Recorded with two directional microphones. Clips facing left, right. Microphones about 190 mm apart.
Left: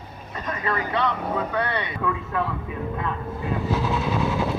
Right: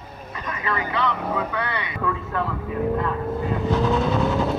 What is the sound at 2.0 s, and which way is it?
Speech, centre (ahead or behind).